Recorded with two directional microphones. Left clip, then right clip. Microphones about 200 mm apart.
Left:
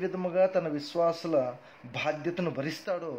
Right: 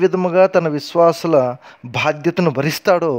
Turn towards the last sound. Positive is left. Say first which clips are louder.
# right 18 dB
turn(degrees=-55)  # may be behind; listen again after turning